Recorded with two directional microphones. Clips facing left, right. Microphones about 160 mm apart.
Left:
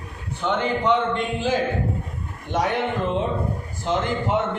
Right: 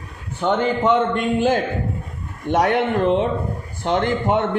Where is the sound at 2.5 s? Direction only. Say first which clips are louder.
Right 5 dB; 65° right (ahead or behind).